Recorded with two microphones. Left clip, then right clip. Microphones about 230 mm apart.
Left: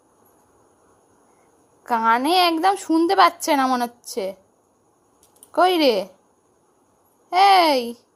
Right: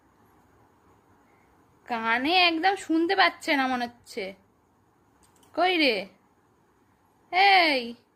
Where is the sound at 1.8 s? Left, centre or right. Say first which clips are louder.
Left 8 dB; left.